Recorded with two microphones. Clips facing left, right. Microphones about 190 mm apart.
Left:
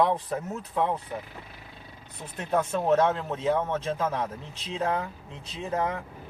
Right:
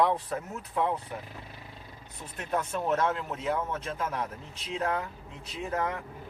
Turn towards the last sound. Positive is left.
turn(degrees=25)  # may be behind; listen again after turning